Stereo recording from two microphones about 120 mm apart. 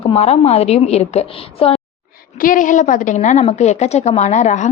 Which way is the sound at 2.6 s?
90° left.